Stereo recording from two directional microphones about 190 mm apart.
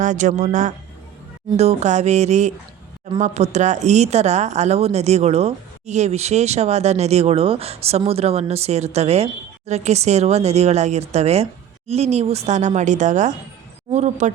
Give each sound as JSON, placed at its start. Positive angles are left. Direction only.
{"t": 0.0, "sound": "speech", "side_deg": -40}